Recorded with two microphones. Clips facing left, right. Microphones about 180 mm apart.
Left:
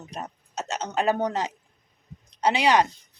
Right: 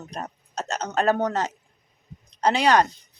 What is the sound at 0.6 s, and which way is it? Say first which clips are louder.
Speech: right 1 dB; 40° right (ahead or behind).